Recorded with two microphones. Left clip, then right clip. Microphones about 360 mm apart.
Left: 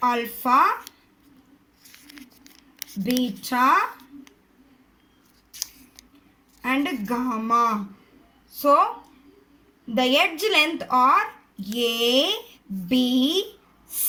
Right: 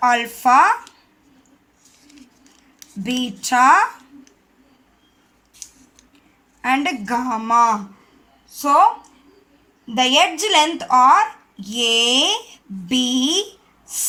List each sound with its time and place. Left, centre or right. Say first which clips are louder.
0.0 s speech: right 7 dB; centre
2.0 s a sound: left 1 dB; centre
3.4 s speech: right 7 dB; centre
5.5 s scissors: left 6 dB; centre
6.6 s a woman's voice: right 6 dB; centre
9.9 s speech: right 5 dB; centre
13.8 s a sound: right 9 dB; centre